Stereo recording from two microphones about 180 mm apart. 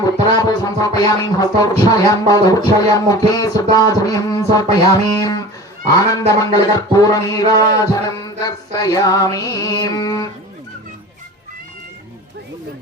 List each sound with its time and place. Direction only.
0.0 s speech: 20° left (ahead or behind)